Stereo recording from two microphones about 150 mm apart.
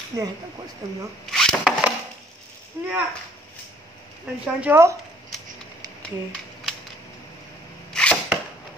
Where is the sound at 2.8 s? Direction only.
20° right (ahead or behind).